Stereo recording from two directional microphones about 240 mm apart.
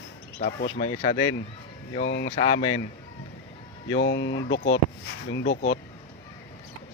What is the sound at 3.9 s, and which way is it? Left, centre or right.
Speech, left.